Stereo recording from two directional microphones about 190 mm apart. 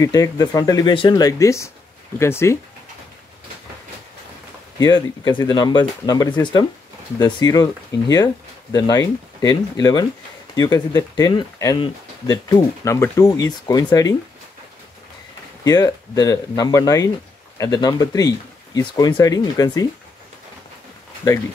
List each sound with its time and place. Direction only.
0.0 s speech: 20° left (ahead or behind)
4.7 s speech: 20° left (ahead or behind)
15.6 s speech: 20° left (ahead or behind)